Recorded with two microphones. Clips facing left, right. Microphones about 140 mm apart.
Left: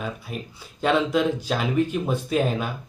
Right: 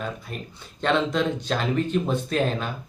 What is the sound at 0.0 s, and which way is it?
Speech, 5° left (ahead or behind).